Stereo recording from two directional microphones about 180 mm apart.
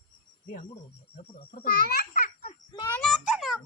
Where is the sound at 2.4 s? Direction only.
30° left (ahead or behind).